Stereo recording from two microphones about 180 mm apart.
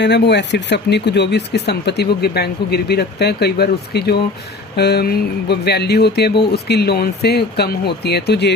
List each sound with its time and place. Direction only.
0.0 s speech: 75° left (ahead or behind)